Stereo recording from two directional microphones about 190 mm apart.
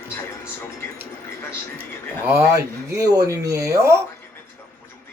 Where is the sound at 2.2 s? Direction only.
15° right (ahead or behind).